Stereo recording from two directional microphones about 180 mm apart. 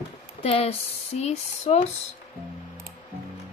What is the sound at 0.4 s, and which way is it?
Speech, 35° left (ahead or behind).